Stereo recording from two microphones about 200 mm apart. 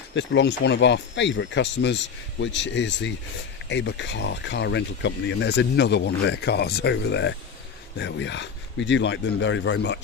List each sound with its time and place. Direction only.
0.1 s speech: 65° left (ahead or behind)